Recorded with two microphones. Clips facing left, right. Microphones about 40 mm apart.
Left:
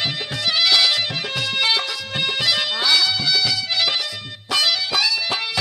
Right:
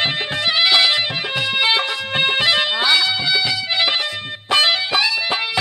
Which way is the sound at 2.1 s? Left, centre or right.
Right.